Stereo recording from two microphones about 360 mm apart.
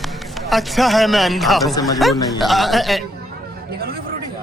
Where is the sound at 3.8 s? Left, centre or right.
Right.